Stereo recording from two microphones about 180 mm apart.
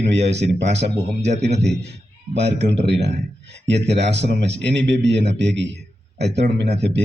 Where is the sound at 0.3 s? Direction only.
70° right (ahead or behind).